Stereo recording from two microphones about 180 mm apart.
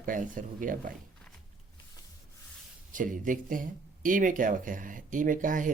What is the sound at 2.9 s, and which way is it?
Speech, 50° right (ahead or behind).